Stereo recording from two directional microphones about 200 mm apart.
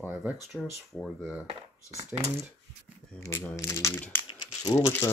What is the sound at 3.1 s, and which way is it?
Speech, 15° left (ahead or behind).